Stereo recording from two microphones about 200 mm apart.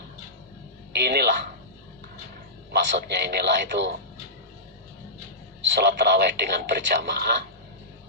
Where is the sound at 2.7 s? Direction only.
55° right (ahead or behind).